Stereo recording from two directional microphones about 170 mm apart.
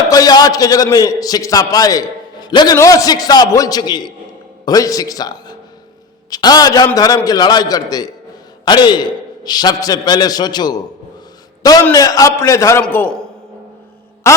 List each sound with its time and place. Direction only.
0.1 s a man's voice: 20° left (ahead or behind)
14.3 s music: 15° left (ahead or behind)